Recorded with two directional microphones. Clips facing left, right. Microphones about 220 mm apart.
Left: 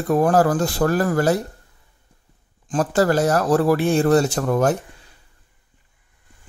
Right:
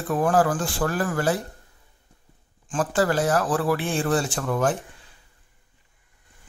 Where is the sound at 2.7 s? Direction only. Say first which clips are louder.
Left 4 dB; 40° left (ahead or behind).